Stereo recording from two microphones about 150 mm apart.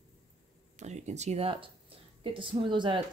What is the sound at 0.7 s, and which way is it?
Speech, 50° right (ahead or behind).